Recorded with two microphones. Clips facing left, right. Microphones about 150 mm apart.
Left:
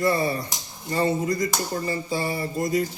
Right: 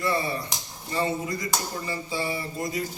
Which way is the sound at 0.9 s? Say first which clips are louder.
Left 4 dB; 40° left (ahead or behind).